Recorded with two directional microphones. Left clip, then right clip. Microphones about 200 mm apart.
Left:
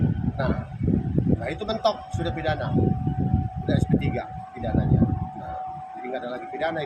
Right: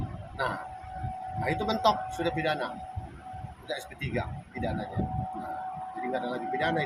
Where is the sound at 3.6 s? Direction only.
10° right (ahead or behind).